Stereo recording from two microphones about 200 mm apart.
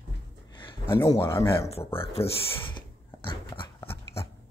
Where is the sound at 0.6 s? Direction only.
15° left (ahead or behind).